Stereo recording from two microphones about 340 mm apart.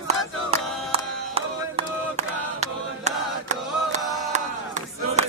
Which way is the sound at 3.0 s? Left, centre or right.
Centre.